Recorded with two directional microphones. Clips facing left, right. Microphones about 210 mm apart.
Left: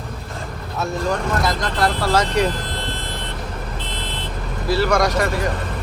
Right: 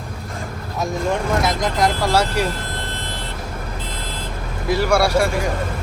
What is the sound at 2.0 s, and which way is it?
Speech, 10° right (ahead or behind).